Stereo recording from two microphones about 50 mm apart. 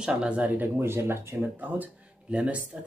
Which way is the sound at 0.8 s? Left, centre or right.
Right.